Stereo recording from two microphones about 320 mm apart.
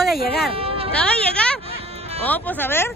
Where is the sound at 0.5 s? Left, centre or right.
Centre.